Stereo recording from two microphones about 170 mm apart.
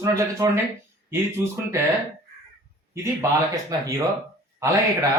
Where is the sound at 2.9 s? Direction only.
20° right (ahead or behind).